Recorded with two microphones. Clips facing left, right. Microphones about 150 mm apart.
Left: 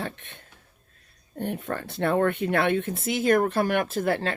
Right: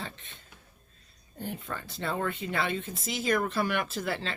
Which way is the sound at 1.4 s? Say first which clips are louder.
Left 7 dB; 65° left (ahead or behind).